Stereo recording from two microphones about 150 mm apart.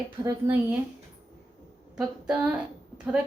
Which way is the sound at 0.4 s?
20° right (ahead or behind).